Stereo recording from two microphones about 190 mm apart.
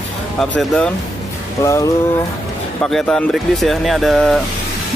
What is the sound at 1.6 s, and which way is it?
Speech, 15° left (ahead or behind).